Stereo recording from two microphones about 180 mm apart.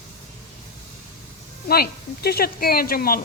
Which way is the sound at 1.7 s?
60° left (ahead or behind).